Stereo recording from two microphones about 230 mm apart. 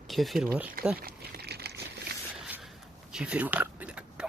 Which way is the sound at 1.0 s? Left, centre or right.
Right.